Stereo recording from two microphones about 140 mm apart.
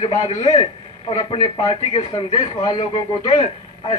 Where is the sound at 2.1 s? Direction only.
35° left (ahead or behind).